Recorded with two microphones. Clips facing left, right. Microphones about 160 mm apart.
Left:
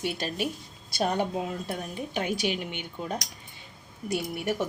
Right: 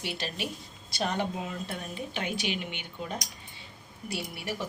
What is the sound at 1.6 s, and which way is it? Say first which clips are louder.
Speech: left 3 dB; 45° left (ahead or behind).